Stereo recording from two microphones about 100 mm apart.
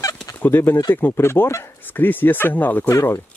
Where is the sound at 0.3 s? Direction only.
20° left (ahead or behind).